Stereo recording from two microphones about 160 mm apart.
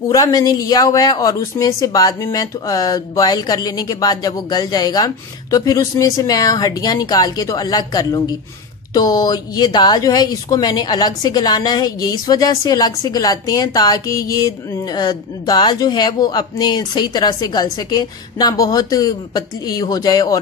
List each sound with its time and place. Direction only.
0.1 s speech: 25° left (ahead or behind)